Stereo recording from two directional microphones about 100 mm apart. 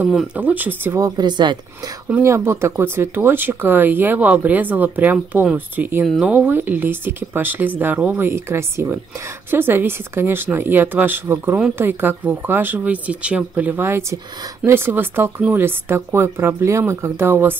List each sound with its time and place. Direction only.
0.4 s speech: 15° right (ahead or behind)
0.9 s speech: 40° right (ahead or behind)
2.2 s speech: 30° right (ahead or behind)
8.3 s speech: 25° right (ahead or behind)